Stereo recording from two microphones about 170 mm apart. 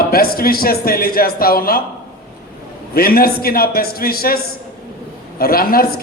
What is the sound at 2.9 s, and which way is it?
A man's voice, 60° left (ahead or behind).